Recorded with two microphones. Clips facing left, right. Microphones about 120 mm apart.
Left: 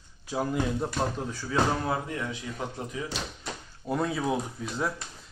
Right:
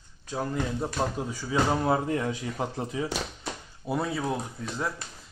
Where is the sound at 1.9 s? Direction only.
30° right (ahead or behind).